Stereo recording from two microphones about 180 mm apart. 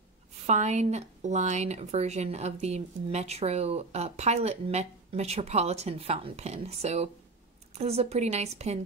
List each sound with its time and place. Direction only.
0.5 s speech: 40° right (ahead or behind)